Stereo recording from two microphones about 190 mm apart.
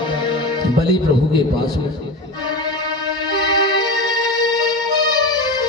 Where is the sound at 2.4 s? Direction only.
20° left (ahead or behind).